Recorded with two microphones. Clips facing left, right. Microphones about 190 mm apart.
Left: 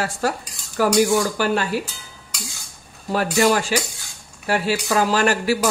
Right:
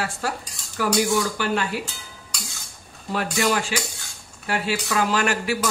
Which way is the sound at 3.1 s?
40° left (ahead or behind).